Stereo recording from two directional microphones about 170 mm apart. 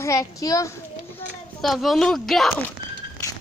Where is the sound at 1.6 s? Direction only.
Centre (ahead or behind).